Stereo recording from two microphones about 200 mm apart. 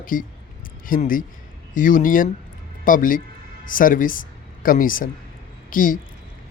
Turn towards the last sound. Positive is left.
turn(degrees=45)  # may be behind; listen again after turning